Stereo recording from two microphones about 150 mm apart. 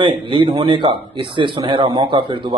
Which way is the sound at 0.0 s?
35° right (ahead or behind).